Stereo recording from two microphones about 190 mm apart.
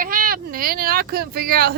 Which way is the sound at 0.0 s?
50° right (ahead or behind).